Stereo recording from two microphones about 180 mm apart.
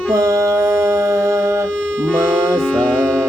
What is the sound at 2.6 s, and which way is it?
Music, 5° left (ahead or behind).